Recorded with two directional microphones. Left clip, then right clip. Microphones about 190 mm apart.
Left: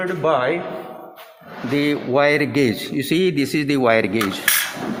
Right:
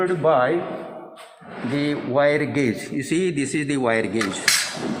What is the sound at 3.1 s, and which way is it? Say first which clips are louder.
Speech: left 4 dB; 90° left.